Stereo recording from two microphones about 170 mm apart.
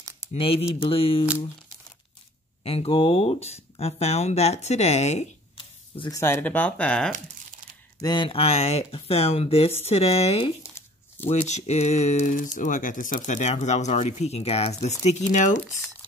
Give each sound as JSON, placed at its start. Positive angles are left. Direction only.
{"t": 0.3, "sound": "speech", "side_deg": 35}
{"t": 2.6, "sound": "speech", "side_deg": 35}
{"t": 6.1, "sound": "speech", "side_deg": 15}
{"t": 8.0, "sound": "speech", "side_deg": 25}
{"t": 10.6, "sound": "tearing", "side_deg": 15}
{"t": 11.2, "sound": "speech", "side_deg": 40}